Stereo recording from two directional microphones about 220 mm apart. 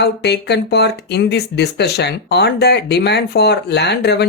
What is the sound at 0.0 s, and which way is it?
Speech, 50° left (ahead or behind).